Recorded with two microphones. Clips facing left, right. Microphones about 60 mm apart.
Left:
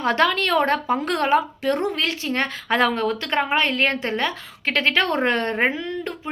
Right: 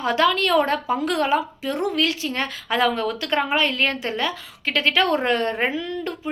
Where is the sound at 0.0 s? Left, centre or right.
Left.